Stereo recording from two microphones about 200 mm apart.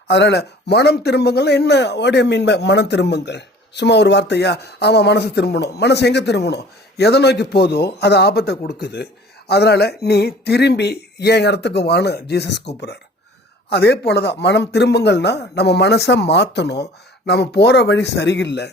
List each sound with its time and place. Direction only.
0.1 s speech: 60° left (ahead or behind)